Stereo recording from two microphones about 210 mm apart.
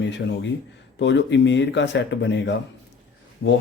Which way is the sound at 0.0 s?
55° left (ahead or behind).